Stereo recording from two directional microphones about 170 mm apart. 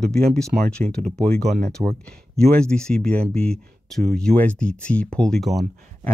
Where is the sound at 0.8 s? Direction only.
45° right (ahead or behind).